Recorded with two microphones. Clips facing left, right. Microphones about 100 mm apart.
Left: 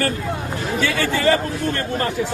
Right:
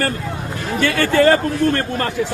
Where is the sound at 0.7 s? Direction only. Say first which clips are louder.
Right 7 dB; 55° right (ahead or behind).